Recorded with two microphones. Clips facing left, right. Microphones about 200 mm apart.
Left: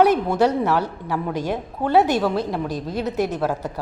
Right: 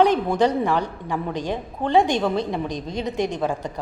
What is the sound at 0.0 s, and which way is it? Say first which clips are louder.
A woman's voice: left 1 dB; 5° left (ahead or behind).